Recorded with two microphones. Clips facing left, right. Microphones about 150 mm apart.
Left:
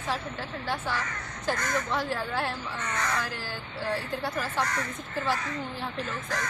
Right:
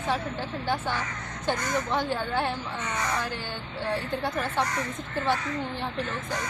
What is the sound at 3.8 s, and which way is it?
Speech, centre (ahead or behind).